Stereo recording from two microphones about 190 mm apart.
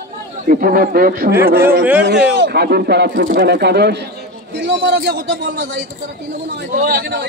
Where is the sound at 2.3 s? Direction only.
60° right (ahead or behind).